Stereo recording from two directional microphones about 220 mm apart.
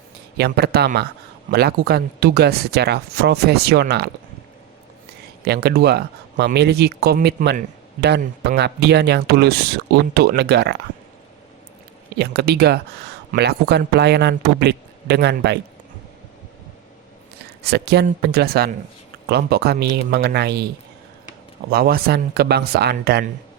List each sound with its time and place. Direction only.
0.3 s speech: 45° right (ahead or behind)
5.5 s speech: 45° right (ahead or behind)
12.1 s speech: 50° right (ahead or behind)
17.6 s speech: 50° right (ahead or behind)
21.7 s speech: 45° right (ahead or behind)